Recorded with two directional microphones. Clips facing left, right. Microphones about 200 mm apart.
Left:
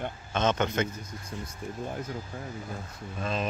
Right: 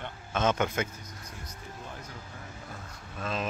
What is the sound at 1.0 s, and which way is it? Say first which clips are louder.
Speech: left 6 dB; 30° left (ahead or behind).